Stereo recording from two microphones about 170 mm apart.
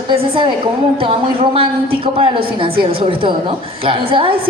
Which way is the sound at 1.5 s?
35° right (ahead or behind).